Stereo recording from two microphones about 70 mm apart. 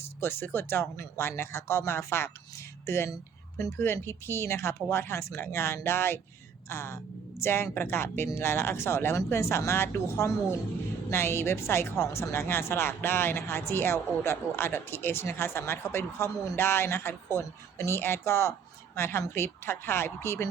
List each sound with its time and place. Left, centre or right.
0.2 s speech: left